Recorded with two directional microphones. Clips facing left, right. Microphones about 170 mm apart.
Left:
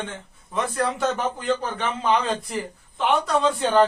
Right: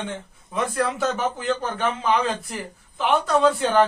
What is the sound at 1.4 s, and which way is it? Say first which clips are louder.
Speech: right 1 dB; 5° right (ahead or behind).